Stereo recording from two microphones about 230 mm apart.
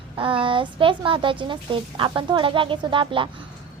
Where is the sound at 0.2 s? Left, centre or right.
Right.